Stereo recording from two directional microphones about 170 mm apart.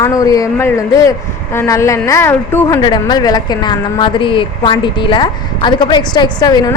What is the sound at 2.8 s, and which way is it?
A woman's voice, 25° left (ahead or behind).